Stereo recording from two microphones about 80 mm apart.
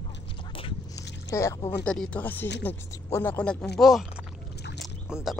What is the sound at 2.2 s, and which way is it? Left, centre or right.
Speech, left.